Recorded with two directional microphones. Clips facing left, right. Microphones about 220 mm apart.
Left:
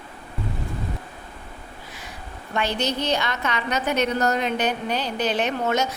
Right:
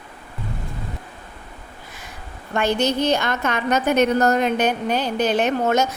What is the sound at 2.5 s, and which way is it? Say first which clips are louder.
A woman's voice: right 5 dB; 50° right (ahead or behind).